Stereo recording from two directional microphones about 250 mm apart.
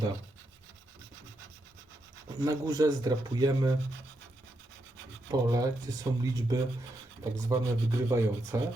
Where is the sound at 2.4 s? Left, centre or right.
Centre.